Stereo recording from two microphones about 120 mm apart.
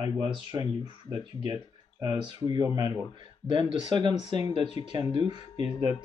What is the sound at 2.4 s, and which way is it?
Speech, 30° right (ahead or behind).